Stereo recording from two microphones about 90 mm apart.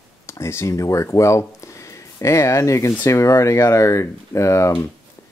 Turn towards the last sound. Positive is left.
turn(degrees=35)  # may be behind; listen again after turning